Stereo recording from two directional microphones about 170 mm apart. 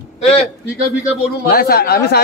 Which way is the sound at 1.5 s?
60° left (ahead or behind).